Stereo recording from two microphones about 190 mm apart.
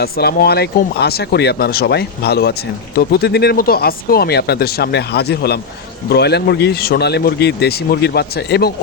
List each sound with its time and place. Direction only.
0.0 s speech: 55° left (ahead or behind)